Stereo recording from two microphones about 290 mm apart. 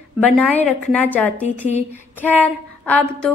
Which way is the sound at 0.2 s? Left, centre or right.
Centre.